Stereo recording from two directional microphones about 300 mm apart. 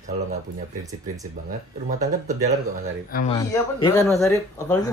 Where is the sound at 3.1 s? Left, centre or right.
Left.